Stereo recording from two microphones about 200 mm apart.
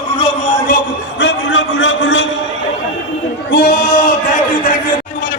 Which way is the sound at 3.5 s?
50° left (ahead or behind).